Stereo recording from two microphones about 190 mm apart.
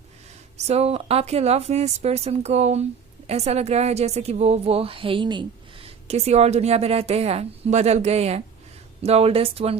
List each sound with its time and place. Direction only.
0.5 s a woman's voice: 35° right (ahead or behind)